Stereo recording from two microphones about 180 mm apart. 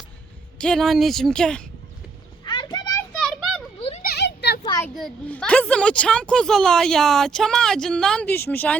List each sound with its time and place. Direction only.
0.6 s a woman's voice: 5° left (ahead or behind)
2.4 s children playing: 25° left (ahead or behind)
3.2 s children playing: centre (ahead or behind)
4.0 s a sound: 65° left (ahead or behind)
4.6 s a sound: 20° left (ahead or behind)
4.9 s a woman's voice: 5° left (ahead or behind)